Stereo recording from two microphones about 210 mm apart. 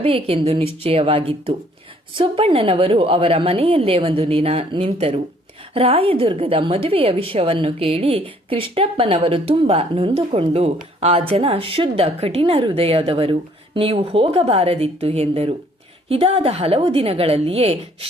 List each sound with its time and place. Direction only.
0.0 s a woman's voice: 25° right (ahead or behind)